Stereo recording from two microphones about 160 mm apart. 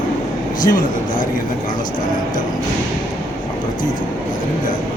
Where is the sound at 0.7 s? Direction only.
60° left (ahead or behind).